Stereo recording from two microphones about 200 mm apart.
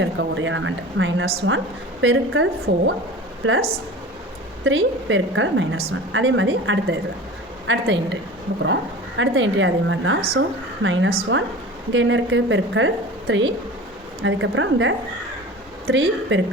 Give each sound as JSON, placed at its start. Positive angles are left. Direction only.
{"t": 0.0, "sound": "a woman's voice", "side_deg": -65}
{"t": 4.6, "sound": "a woman's voice", "side_deg": -75}